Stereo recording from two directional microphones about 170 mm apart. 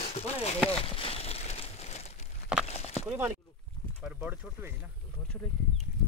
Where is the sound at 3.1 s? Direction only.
5° right (ahead or behind).